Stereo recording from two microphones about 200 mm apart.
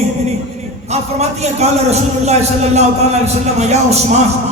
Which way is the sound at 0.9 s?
35° right (ahead or behind).